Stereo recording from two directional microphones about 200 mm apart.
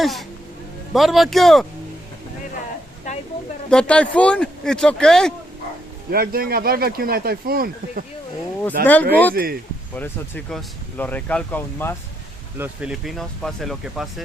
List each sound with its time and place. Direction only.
0.0 s speech: centre (ahead or behind)
3.1 s a sound: 35° left (ahead or behind)
3.7 s speech: 5° left (ahead or behind)
6.1 s speech: 50° right (ahead or behind)
9.9 s speech: 5° left (ahead or behind)
12.5 s speech: 5° right (ahead or behind)